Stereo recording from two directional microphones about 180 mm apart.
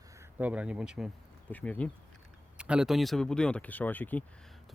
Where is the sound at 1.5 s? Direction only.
10° left (ahead or behind).